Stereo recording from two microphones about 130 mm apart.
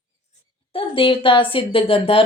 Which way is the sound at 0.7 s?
45° left (ahead or behind).